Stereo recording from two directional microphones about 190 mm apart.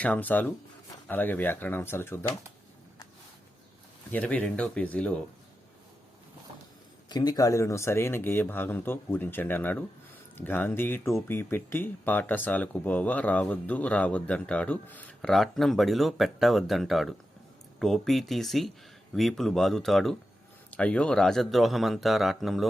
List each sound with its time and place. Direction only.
0.0 s speech: 10° left (ahead or behind)
4.1 s speech: 10° left (ahead or behind)
7.1 s speech: 20° left (ahead or behind); by 22.6 s centre (ahead or behind)